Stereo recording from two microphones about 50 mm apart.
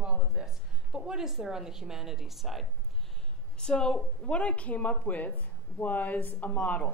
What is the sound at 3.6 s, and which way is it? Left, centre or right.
A woman's voice, centre.